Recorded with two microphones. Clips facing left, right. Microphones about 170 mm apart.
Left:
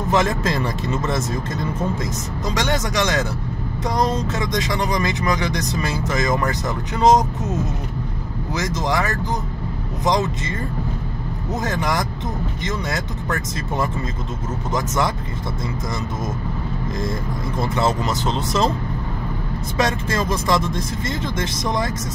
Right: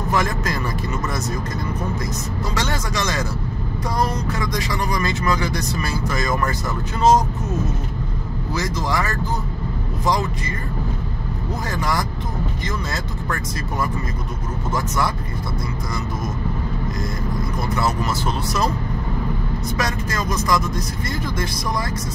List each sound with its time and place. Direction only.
0.1 s speech: 25° left (ahead or behind)
2.5 s speech: 15° left (ahead or behind)
8.8 s speech: 20° left (ahead or behind)
11.6 s speech: 20° left (ahead or behind)
17.6 s speech: 25° left (ahead or behind)
19.8 s speech: 25° left (ahead or behind)